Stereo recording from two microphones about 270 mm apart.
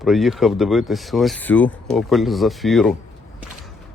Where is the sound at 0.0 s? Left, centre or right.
Centre.